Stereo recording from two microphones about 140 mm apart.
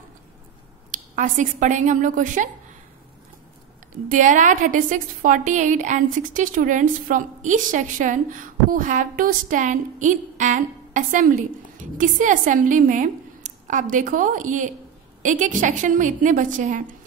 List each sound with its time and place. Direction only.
0.9 s speech: 65° right (ahead or behind)
4.1 s a woman's voice: 65° right (ahead or behind)